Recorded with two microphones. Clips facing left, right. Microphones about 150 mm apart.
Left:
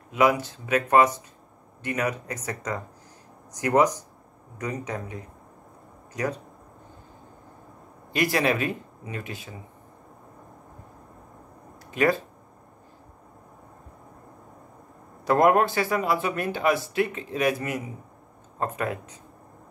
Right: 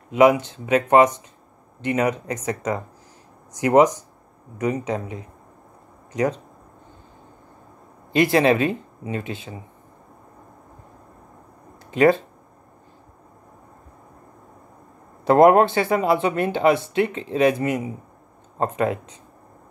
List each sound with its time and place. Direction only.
0.1 s speech: 20° right (ahead or behind)
8.1 s speech: 25° right (ahead or behind)
11.9 s speech: 25° right (ahead or behind)
15.2 s speech: 25° right (ahead or behind)